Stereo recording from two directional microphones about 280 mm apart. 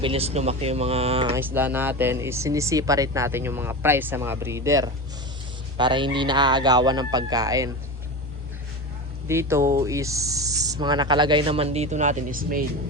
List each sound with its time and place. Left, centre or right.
0.0 s speech: right
1.3 s a man's voice: centre
9.2 s speech: centre; by 12.6 s right